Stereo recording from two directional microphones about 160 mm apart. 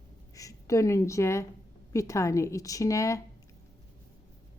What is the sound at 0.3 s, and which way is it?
A woman's voice, 20° left (ahead or behind).